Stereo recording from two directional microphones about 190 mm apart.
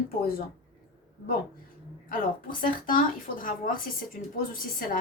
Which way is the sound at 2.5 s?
45° left (ahead or behind).